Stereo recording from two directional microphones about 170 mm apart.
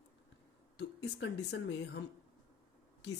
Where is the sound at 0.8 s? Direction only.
90° left.